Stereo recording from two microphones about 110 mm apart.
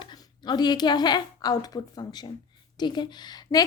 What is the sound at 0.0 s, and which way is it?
A woman's voice, 45° left (ahead or behind).